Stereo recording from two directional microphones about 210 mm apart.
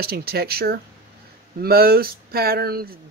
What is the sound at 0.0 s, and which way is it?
Speech, 50° right (ahead or behind).